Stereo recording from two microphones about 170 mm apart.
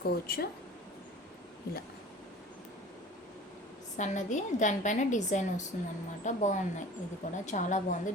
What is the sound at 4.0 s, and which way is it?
A woman's voice, 45° left (ahead or behind).